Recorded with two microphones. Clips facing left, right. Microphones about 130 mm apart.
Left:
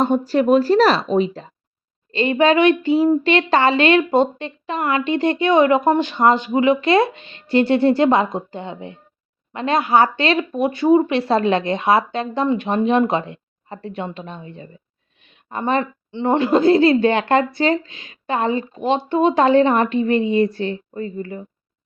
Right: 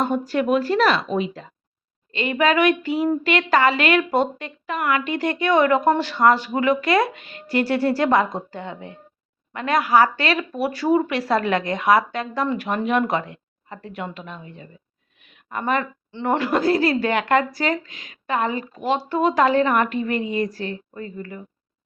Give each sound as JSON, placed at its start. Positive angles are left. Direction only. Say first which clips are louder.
{"t": 0.0, "sound": "speech", "louder": "left 5 dB", "side_deg": 30}